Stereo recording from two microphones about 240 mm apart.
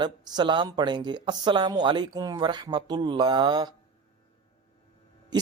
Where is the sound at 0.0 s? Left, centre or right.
Centre.